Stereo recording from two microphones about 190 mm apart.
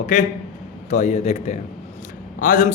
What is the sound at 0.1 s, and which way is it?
A man's voice, 40° left (ahead or behind).